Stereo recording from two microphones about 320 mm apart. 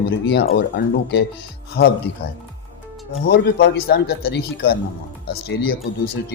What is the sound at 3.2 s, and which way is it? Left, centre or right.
Speech, left.